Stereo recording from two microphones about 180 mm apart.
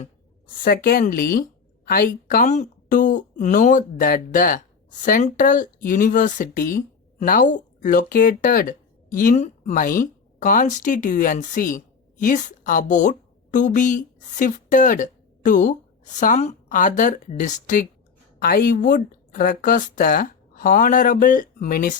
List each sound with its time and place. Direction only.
0.6 s a woman's voice: 55° left (ahead or behind)